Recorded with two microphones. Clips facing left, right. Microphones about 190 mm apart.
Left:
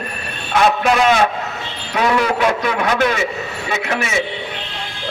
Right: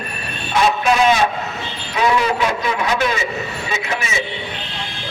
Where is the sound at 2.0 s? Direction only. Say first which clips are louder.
Left 1 dB; 60° left (ahead or behind).